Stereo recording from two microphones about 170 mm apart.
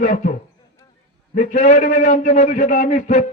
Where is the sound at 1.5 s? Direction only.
45° left (ahead or behind).